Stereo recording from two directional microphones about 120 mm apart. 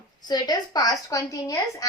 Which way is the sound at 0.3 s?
35° left (ahead or behind).